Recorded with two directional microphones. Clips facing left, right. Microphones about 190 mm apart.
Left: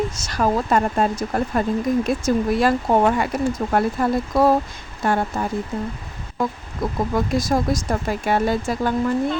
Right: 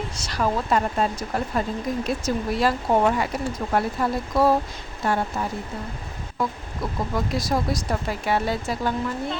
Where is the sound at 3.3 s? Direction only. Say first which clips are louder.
Left 6 dB; 50° left (ahead or behind).